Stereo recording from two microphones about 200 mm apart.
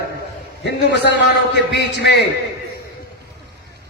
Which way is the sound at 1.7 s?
55° left (ahead or behind).